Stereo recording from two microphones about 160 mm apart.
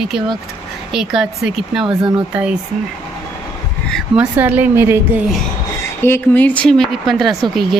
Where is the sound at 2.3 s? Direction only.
10° right (ahead or behind).